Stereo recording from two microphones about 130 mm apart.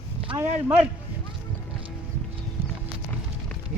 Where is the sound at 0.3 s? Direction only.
15° right (ahead or behind).